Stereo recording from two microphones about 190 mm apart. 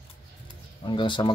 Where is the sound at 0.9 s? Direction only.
25° left (ahead or behind).